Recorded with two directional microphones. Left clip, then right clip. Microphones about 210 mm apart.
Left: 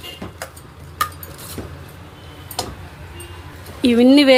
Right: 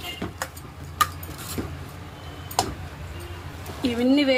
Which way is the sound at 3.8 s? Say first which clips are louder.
Left 9 dB; 45° left (ahead or behind).